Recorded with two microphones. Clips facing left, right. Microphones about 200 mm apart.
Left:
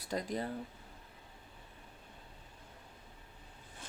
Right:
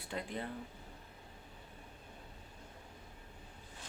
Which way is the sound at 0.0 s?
40° left (ahead or behind).